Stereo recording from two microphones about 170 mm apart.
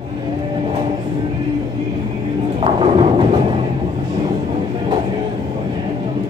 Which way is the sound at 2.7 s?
30° right (ahead or behind).